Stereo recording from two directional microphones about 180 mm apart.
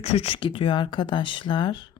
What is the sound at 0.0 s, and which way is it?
Speech, 35° left (ahead or behind).